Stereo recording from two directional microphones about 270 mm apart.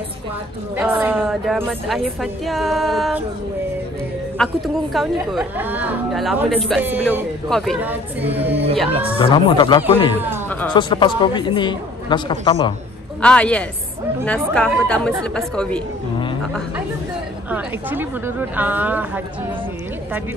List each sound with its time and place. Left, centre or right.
0.7 s a woman's voice: centre
4.4 s a woman's voice: centre
9.2 s a woman's voice: centre
13.2 s a woman's voice: centre
17.5 s speech: centre